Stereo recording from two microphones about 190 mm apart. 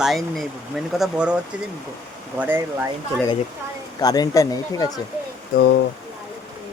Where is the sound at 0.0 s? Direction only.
Centre (ahead or behind).